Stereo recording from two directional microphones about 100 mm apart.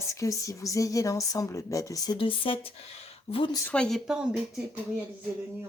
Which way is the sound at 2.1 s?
60° left (ahead or behind).